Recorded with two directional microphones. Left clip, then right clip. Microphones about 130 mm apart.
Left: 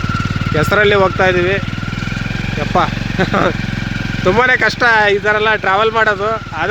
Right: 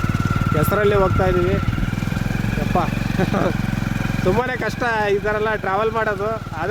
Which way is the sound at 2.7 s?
10° right (ahead or behind).